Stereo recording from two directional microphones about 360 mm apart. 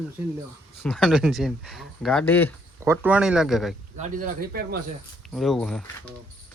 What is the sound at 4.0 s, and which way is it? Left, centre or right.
Speech, right.